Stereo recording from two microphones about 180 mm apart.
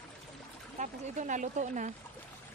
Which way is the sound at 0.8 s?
45° right (ahead or behind).